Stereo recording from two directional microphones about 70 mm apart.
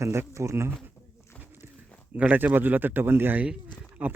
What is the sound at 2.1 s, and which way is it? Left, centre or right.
A man's voice, right.